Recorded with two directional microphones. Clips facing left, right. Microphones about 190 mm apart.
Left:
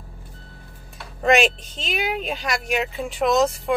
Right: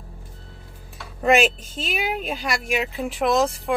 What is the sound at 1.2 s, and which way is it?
Speech, 5° right (ahead or behind).